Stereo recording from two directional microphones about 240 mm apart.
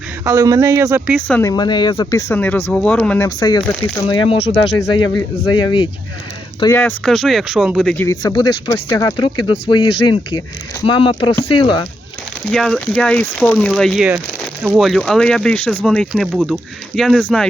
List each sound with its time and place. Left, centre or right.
0.3 s speech: centre
1.3 s speech: centre
4.1 s speech: left; by 8.0 s centre
8.2 s speech: centre
12.5 s speech: centre